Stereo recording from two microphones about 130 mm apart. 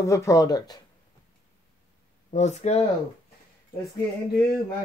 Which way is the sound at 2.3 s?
60° left (ahead or behind).